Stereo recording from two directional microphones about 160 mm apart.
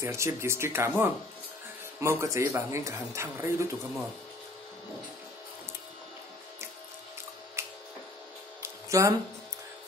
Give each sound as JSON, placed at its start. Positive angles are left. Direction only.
{"t": 0.0, "sound": "speech", "side_deg": -15}
{"t": 7.6, "sound": "tick-tock", "side_deg": -15}
{"t": 8.6, "sound": "a sound", "side_deg": -20}